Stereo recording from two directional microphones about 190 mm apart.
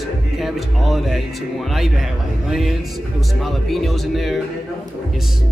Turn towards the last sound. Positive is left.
turn(degrees=0)  # may be behind; listen again after turning